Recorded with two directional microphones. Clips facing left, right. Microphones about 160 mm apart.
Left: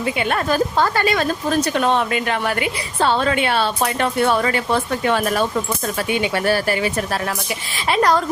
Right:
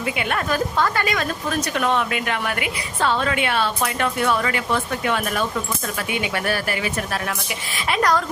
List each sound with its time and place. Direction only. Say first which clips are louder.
0.0 s a woman's voice: left 4 dB; 30° left (ahead or behind)